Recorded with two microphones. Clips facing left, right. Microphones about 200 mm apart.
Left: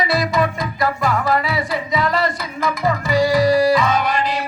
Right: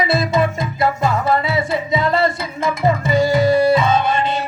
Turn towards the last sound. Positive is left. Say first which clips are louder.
# right 2 dB
turn(degrees=-25)  # may be behind; listen again after turning